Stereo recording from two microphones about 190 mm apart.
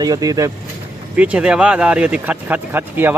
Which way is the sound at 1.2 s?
5° right (ahead or behind).